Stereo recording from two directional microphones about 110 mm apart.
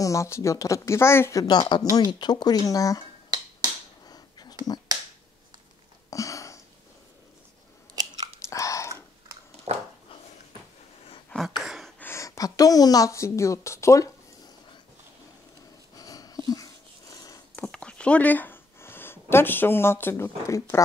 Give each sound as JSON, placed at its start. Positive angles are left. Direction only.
{"t": 0.0, "sound": "speech", "side_deg": 25}
{"t": 1.5, "sound": "speech", "side_deg": 40}
{"t": 4.1, "sound": "a sound", "side_deg": 40}
{"t": 6.0, "sound": "a sound", "side_deg": 30}
{"t": 7.9, "sound": "chewing", "side_deg": -35}
{"t": 8.5, "sound": "chewing", "side_deg": 30}
{"t": 9.7, "sound": "dog", "side_deg": -70}
{"t": 11.4, "sound": "gasp", "side_deg": -5}
{"t": 12.0, "sound": "a woman's voice", "side_deg": 25}
{"t": 16.0, "sound": "wheeze", "side_deg": 35}
{"t": 17.6, "sound": "a sound", "side_deg": 10}